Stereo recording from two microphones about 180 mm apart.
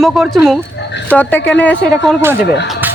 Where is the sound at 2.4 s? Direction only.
65° left (ahead or behind).